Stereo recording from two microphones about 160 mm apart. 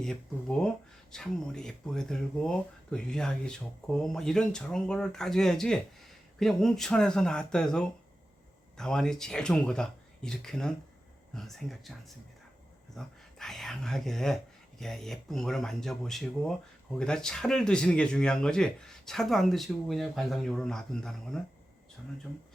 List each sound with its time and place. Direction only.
0.0 s speech: 5° left (ahead or behind)